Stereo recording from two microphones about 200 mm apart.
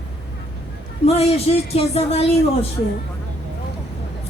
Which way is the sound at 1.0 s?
30° left (ahead or behind).